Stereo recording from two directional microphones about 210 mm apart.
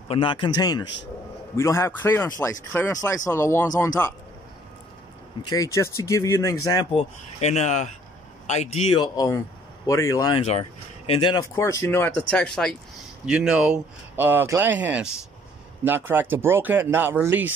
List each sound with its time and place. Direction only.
0.1 s speech: 25° left (ahead or behind)
5.5 s speech: 15° left (ahead or behind); by 17.5 s 10° right (ahead or behind)